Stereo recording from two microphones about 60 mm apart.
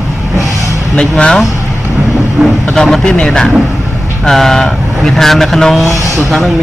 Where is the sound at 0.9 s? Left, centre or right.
Centre.